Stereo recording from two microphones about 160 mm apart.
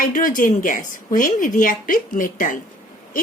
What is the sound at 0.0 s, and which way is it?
A woman's voice, 60° left (ahead or behind).